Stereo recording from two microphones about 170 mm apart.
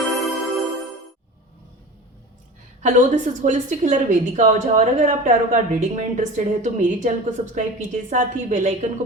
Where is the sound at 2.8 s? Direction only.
50° right (ahead or behind).